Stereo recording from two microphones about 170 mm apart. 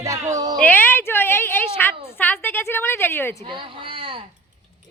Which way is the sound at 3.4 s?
30° right (ahead or behind).